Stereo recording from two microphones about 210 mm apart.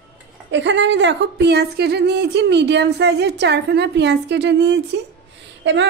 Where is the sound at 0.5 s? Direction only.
60° right (ahead or behind).